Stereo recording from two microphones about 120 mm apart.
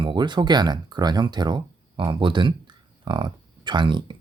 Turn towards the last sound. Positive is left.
turn(degrees=-40)  # may be behind; listen again after turning